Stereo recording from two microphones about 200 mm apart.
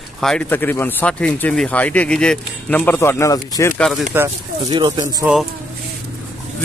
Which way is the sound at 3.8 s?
Centre (ahead or behind).